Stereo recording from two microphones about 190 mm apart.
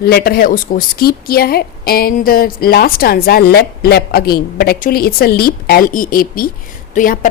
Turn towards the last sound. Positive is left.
turn(degrees=45)  # may be behind; listen again after turning